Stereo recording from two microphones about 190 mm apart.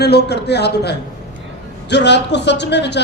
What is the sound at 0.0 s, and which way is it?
A woman's voice, 60° left (ahead or behind).